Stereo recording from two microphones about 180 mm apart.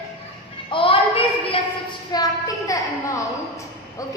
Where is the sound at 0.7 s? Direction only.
30° left (ahead or behind).